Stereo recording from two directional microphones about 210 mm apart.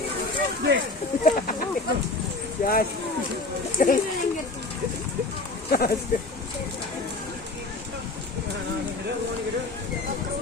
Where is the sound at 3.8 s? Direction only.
40° left (ahead or behind).